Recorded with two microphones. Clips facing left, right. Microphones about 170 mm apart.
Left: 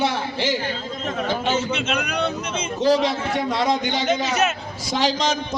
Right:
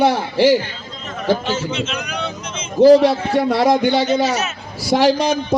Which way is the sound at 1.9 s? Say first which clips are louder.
Left 2 dB; 60° left (ahead or behind).